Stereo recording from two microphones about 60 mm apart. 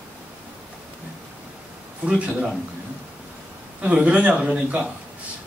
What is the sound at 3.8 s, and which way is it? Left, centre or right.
Speech, centre.